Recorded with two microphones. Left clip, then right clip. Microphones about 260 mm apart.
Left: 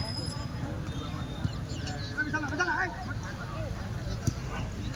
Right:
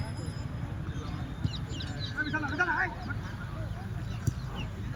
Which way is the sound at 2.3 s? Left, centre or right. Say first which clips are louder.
Right 1 dB; centre.